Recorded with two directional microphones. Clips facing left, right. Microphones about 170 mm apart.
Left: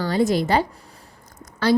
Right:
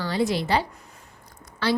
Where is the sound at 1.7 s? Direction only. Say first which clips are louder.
Left 7 dB; 45° left (ahead or behind).